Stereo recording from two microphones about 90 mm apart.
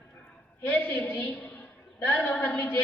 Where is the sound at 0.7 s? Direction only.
20° left (ahead or behind).